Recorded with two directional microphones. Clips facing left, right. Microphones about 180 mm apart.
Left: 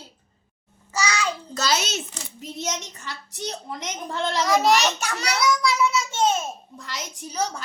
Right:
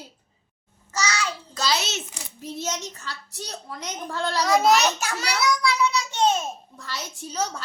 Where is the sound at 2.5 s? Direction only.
15° left (ahead or behind).